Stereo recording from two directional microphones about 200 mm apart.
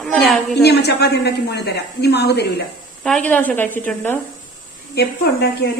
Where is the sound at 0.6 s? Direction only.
55° left (ahead or behind).